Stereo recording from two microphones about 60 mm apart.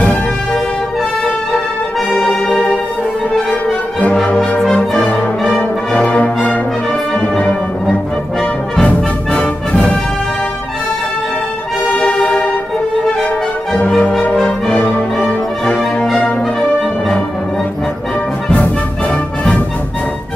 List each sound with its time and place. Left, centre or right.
1.5 s music: centre
4.6 s music: centre
5.9 s music: left
6.9 s brass instrument: centre
8.8 s music: centre
12.0 s music: centre
13.7 s brass instrument: centre
15.1 s music: centre
18.5 s music: left